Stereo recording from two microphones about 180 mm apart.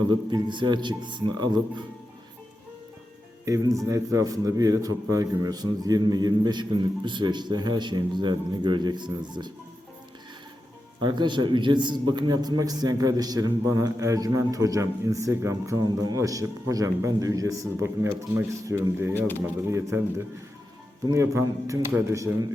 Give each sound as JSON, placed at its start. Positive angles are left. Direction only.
{"t": 0.1, "sound": "a man's voice", "side_deg": -25}
{"t": 3.4, "sound": "a man's voice", "side_deg": -20}
{"t": 11.0, "sound": "a man's voice", "side_deg": -25}